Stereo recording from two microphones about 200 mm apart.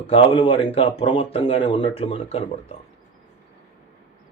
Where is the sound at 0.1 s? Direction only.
25° left (ahead or behind).